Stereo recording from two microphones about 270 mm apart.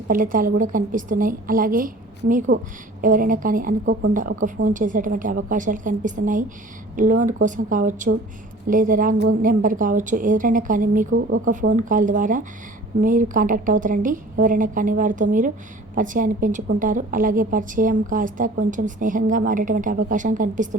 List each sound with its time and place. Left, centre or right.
0.1 s a woman's voice: right